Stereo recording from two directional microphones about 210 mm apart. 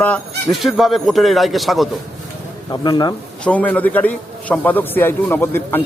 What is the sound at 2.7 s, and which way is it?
Speech, 20° left (ahead or behind).